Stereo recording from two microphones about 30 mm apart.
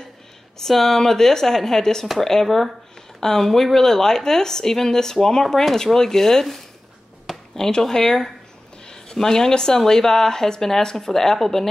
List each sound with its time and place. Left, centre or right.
0.6 s a woman's voice: centre
2.4 s a woman's voice: centre
7.5 s a woman's voice: centre